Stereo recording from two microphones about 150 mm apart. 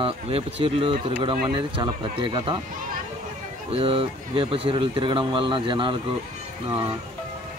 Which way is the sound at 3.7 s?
40° right (ahead or behind).